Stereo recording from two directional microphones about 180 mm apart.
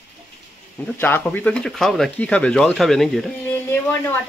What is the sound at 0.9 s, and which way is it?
Speech, 10° left (ahead or behind).